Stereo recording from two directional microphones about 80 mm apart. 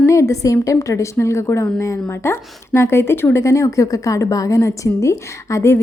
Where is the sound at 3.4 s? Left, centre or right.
Left.